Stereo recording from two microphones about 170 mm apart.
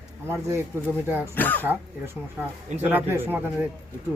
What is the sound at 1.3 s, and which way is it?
Speech, 10° left (ahead or behind).